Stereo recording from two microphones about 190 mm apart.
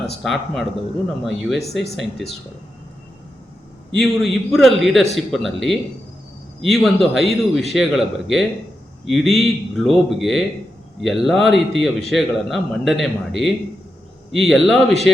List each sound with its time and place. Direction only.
0.2 s a man's voice: centre (ahead or behind)
3.9 s a man's voice: centre (ahead or behind)
14.3 s a man's voice: centre (ahead or behind)